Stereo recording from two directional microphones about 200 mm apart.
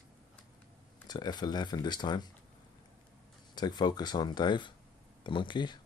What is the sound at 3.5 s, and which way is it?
Speech, 20° left (ahead or behind).